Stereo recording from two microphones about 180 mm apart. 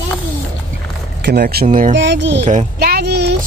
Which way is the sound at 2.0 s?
80° right.